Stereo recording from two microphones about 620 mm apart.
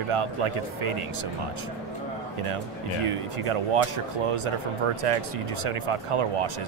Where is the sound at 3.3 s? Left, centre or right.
Right.